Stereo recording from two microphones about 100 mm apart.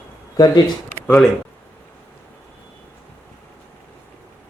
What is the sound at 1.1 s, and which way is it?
Speech, 5° left (ahead or behind).